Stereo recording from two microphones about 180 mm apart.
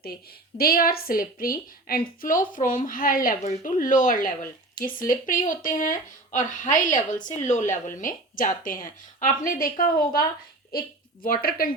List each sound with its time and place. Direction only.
0.5 s a woman's voice: 55° left (ahead or behind)